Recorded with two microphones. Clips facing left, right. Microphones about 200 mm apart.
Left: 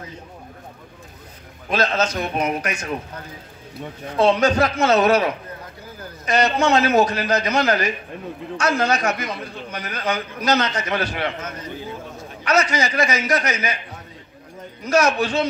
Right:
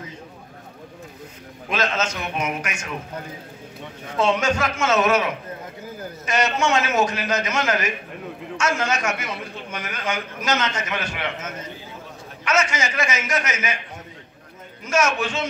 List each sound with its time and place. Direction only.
1.7 s a man's voice: 35° left (ahead or behind)
4.2 s a man's voice: 35° left (ahead or behind)
12.4 s a man's voice: 35° left (ahead or behind)
14.9 s a man's voice: 35° left (ahead or behind)